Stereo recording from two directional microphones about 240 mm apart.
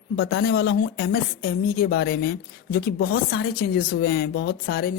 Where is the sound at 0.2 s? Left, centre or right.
Left.